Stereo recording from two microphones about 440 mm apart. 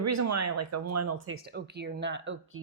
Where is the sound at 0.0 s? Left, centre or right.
Right.